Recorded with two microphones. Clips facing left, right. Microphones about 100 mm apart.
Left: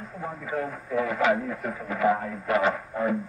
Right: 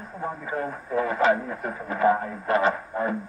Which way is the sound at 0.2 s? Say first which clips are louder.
Right 1 dB; 35° right (ahead or behind).